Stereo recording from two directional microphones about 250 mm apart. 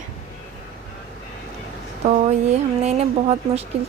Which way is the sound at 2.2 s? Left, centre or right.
Right.